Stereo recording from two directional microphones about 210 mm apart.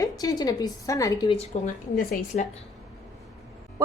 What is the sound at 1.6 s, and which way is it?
Speech, 35° left (ahead or behind).